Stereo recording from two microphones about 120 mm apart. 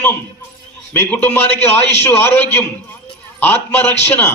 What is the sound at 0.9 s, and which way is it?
A man's voice, 15° left (ahead or behind).